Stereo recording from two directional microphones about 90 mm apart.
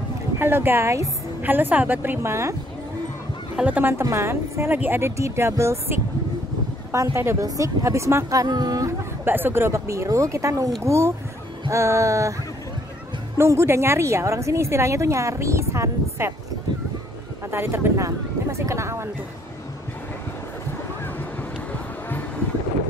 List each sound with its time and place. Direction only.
0.4 s speech: 25° right (ahead or behind)
1.4 s speech: 20° right (ahead or behind)
3.5 s speech: 15° right (ahead or behind)
4.0 s speech: 30° right (ahead or behind)
9.2 s speech: 25° right (ahead or behind)
13.4 s speech: 30° right (ahead or behind)
17.5 s speech: 25° right (ahead or behind)